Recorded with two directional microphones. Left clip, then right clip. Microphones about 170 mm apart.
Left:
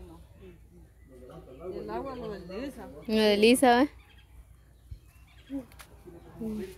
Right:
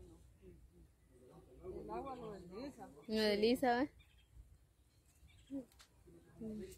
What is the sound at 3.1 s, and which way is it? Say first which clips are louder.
Speech: left 12 dB; 10° left (ahead or behind).